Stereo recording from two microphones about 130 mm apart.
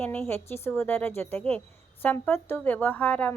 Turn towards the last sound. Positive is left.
turn(degrees=10)  # may be behind; listen again after turning